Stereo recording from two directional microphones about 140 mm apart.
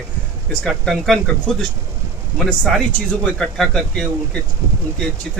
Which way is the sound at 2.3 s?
5° left (ahead or behind).